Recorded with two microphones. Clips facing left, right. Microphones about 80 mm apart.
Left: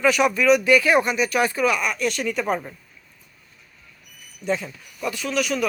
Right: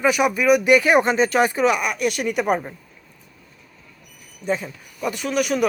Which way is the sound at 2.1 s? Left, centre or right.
Right.